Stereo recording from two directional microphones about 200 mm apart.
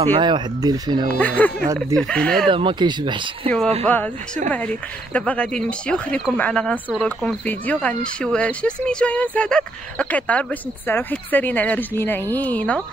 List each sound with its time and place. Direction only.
0.0 s speech: 25° right (ahead or behind)
1.2 s speech: 10° left (ahead or behind)
2.5 s speech: 25° right (ahead or behind)
3.4 s speech: 5° left (ahead or behind)